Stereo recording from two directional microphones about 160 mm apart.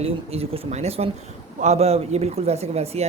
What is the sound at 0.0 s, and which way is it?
Speech, 40° right (ahead or behind).